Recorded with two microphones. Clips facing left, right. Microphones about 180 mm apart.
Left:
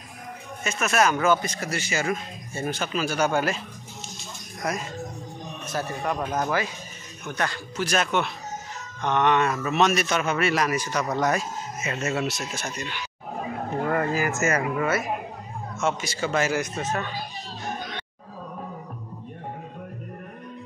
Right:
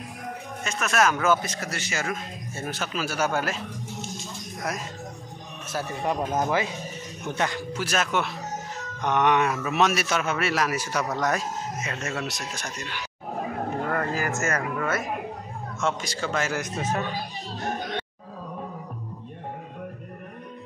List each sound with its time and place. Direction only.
0.7 s a man's voice: 5° left (ahead or behind)
4.7 s a man's voice: 5° right (ahead or behind)
6.0 s a man's voice: 20° right (ahead or behind)
7.8 s a man's voice: 5° right (ahead or behind)
16.7 s a man's voice: 10° right (ahead or behind)